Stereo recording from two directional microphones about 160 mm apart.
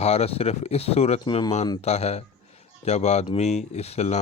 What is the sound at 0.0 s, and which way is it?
Speech, 40° left (ahead or behind).